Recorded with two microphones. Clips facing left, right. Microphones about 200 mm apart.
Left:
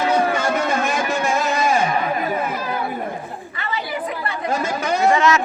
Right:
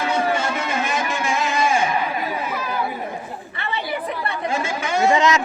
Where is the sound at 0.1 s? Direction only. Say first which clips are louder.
Left 3 dB; 40° left (ahead or behind).